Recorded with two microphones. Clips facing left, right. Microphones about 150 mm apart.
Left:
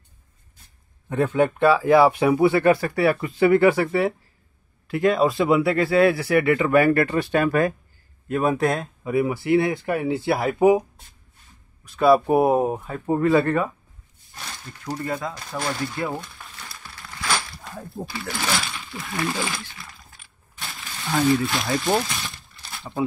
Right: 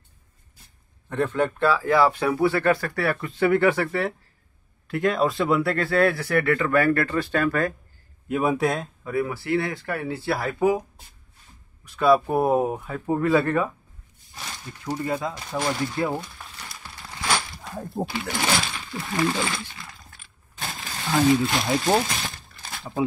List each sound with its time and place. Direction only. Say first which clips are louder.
1.0 s speech: left 3 dB; 10° left (ahead or behind)
8.3 s speech: left 1 dB; 5° right (ahead or behind)
9.0 s speech: left 5 dB; 15° left (ahead or behind)
12.0 s speech: left 3 dB; 5° left (ahead or behind)
15.0 s speech: right 1 dB; 15° right (ahead or behind)
15.5 s crumpling: right 2 dB; 10° right (ahead or behind)
18.0 s speech: right 5 dB; 55° right (ahead or behind)
19.2 s speech: right 2 dB; centre (ahead or behind)
20.6 s a sound: right 3 dB; 40° right (ahead or behind)
21.0 s speech: right 1 dB; 20° right (ahead or behind)
22.0 s a sound: right 2 dB; 45° right (ahead or behind)